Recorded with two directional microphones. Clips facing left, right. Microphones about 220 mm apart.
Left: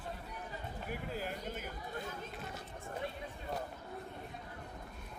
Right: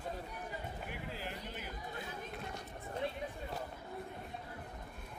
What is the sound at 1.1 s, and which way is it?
Speech, 45° left (ahead or behind).